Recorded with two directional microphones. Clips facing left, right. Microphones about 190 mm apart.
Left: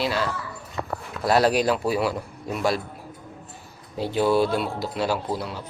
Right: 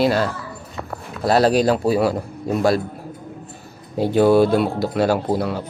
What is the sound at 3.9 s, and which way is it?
Speech, 50° right (ahead or behind).